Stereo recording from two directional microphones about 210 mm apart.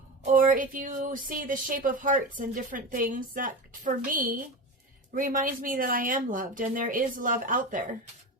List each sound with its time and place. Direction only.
0.2 s speech: 35° right (ahead or behind)